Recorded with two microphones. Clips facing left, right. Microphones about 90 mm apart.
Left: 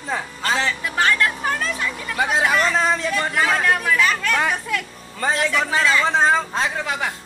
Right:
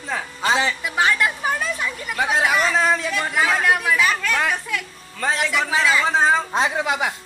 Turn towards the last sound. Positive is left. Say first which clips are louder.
# right 3 dB
turn(degrees=-15)  # may be behind; listen again after turning